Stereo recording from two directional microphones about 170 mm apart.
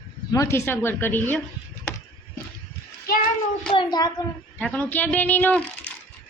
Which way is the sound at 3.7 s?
25° left (ahead or behind).